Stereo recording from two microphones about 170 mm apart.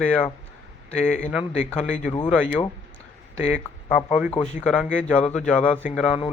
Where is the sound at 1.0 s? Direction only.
45° left (ahead or behind).